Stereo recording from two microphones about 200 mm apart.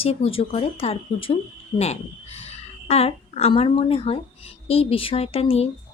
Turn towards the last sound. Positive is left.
turn(degrees=30)  # may be behind; listen again after turning